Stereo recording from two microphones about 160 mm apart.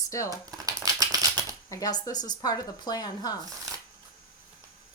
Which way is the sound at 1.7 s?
20° left (ahead or behind).